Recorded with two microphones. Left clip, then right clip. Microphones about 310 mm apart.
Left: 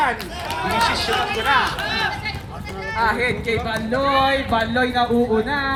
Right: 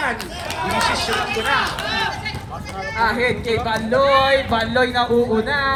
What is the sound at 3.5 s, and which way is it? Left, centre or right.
Speech, centre.